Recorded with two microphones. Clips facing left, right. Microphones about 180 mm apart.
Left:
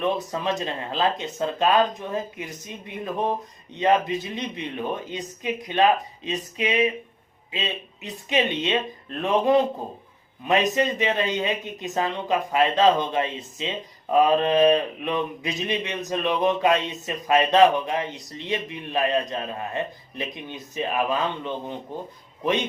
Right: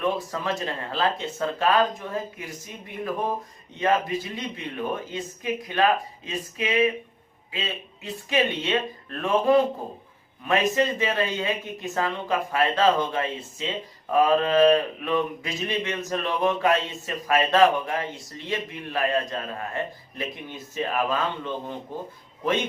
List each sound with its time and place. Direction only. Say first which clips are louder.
0.0 s speech: left 2 dB; 20° left (ahead or behind)